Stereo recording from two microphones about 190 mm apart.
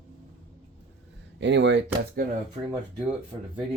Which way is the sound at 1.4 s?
70° right (ahead or behind).